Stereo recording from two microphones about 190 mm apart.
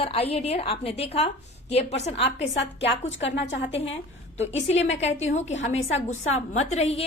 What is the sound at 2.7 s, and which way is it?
Speech, 75° left (ahead or behind).